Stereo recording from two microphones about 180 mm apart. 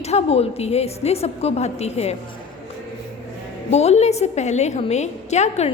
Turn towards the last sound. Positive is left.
turn(degrees=40)  # may be behind; listen again after turning